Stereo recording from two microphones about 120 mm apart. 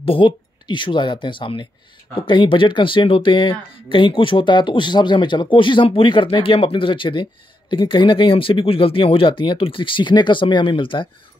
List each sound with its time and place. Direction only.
0.0 s speech: 45° left (ahead or behind)